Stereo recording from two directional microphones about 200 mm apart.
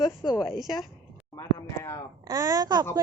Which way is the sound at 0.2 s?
25° left (ahead or behind).